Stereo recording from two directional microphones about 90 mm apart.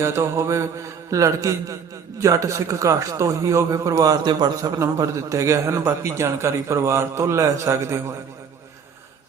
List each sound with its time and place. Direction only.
0.0 s a man's voice: 35° right (ahead or behind); by 4.5 s 50° right (ahead or behind)
4.6 s a man's voice: 35° right (ahead or behind)